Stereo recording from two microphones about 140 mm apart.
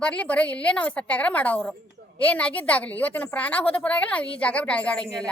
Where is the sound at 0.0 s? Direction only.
10° left (ahead or behind).